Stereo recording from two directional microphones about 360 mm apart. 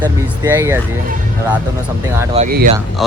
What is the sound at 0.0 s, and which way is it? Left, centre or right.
Speech, centre.